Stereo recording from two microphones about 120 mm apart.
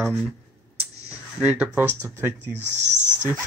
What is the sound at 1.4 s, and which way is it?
Speech, 10° right (ahead or behind).